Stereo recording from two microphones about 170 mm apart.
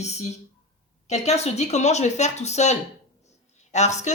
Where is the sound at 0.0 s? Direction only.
40° left (ahead or behind).